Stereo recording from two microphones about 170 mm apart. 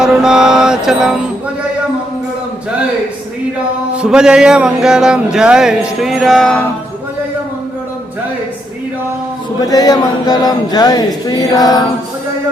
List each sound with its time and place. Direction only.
0.0 s mantra: 5° right (ahead or behind)
3.9 s speech: 5° right (ahead or behind)
9.6 s music: 20° left (ahead or behind)